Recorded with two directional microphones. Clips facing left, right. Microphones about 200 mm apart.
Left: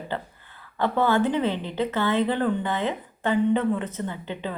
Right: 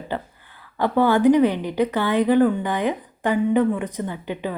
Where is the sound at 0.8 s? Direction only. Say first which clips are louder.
Right 4 dB; 15° right (ahead or behind).